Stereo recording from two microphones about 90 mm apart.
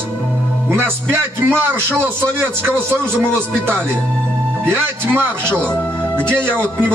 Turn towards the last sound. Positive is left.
turn(degrees=-25)  # may be behind; listen again after turning